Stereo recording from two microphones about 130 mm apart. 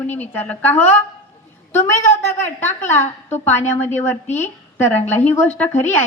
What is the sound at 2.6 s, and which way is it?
Speech, 65° left (ahead or behind).